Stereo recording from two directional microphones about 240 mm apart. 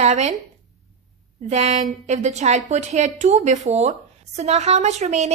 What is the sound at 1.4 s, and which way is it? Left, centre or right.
A woman's voice, right.